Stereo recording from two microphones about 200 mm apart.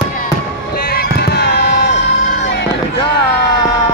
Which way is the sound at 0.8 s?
50° left (ahead or behind).